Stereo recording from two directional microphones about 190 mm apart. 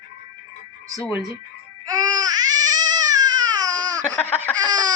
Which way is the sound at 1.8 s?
20° right (ahead or behind).